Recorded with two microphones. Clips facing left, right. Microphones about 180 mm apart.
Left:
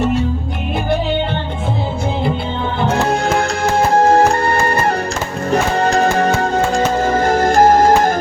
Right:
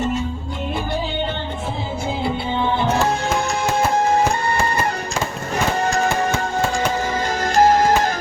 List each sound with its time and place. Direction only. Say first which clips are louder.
4.1 s music: left 6 dB; 65° left (ahead or behind)
6.7 s music: left 6 dB; 55° left (ahead or behind)